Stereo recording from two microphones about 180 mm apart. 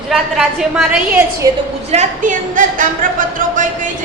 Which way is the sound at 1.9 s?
40° right (ahead or behind).